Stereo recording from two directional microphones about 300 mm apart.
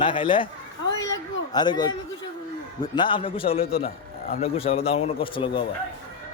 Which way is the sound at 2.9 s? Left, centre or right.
Centre.